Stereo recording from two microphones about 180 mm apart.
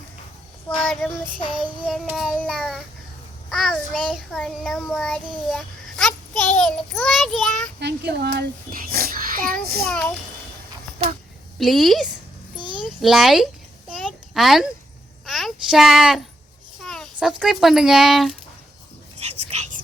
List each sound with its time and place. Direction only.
0.9 s child singing: 5° left (ahead or behind)
5.5 s a child's voice: centre (ahead or behind)
7.8 s a child's voice: 65° right (ahead or behind)
11.5 s child singing: centre (ahead or behind)
12.5 s a sound: 25° right (ahead or behind)
12.8 s a child's voice: centre (ahead or behind)
14.0 s a sound: centre (ahead or behind)
15.3 s a child's voice: centre (ahead or behind)
19.2 s whispering: 35° right (ahead or behind)